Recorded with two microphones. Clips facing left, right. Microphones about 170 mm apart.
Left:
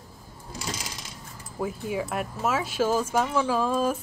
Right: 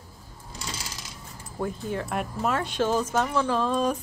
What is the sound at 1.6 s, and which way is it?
Speech, 5° left (ahead or behind).